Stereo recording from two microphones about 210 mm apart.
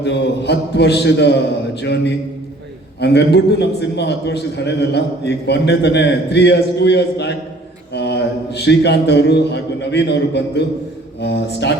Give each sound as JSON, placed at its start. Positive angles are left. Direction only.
{"t": 0.0, "sound": "a man's voice", "side_deg": 55}